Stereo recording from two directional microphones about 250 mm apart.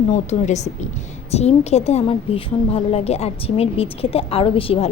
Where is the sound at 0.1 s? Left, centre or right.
Left.